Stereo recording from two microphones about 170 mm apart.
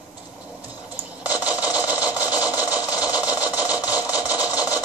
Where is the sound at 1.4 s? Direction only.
10° right (ahead or behind).